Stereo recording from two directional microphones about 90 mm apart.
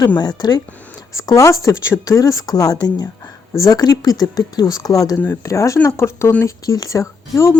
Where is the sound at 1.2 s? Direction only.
35° left (ahead or behind).